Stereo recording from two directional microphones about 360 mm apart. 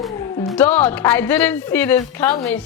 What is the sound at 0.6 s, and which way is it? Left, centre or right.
Speech, centre.